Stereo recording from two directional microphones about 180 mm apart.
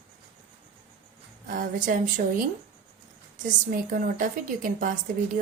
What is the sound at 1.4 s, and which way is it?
Speech, 50° right (ahead or behind).